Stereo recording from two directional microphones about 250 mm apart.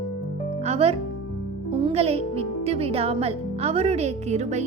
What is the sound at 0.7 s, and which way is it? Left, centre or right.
A woman's voice, right.